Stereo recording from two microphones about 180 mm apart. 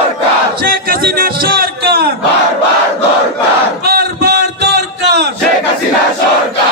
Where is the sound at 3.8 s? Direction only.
65° right (ahead or behind).